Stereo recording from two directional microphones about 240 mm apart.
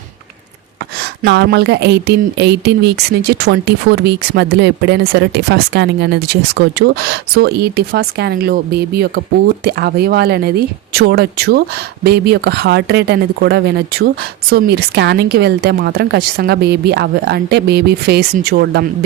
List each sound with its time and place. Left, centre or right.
1.2 s speech: right